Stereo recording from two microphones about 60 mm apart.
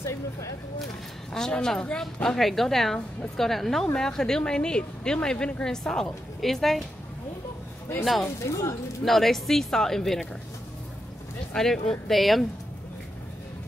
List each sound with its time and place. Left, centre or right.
0.0 s speech: left
1.3 s a woman's voice: centre
8.0 s speech: centre
8.4 s speech: left
9.0 s speech: centre
11.5 s speech: centre